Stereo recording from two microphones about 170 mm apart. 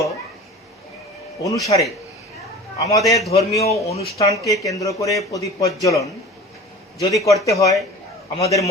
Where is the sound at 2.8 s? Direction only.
20° left (ahead or behind).